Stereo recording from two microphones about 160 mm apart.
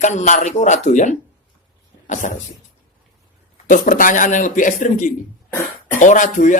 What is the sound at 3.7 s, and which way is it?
Speech, 60° left (ahead or behind).